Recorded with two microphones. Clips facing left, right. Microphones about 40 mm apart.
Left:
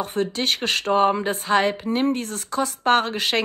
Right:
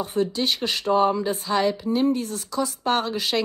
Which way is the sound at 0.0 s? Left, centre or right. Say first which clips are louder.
Even; left.